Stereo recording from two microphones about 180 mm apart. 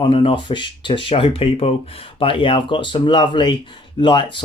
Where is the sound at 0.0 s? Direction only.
30° left (ahead or behind).